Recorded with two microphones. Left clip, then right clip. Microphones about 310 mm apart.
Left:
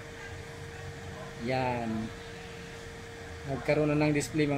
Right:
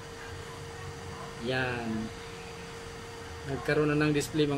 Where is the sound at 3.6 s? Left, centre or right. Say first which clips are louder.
Even; right.